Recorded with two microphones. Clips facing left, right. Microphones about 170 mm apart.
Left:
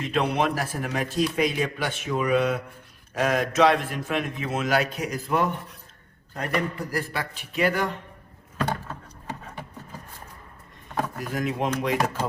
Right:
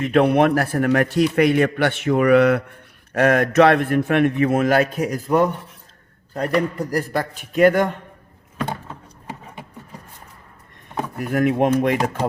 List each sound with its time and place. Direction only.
0.0 s a man's voice: 60° right (ahead or behind)
11.2 s a man's voice: 60° right (ahead or behind)